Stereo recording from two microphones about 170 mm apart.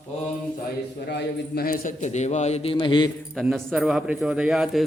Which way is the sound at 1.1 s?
80° left.